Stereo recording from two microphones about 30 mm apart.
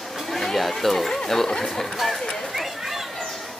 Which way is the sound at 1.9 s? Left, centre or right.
Centre.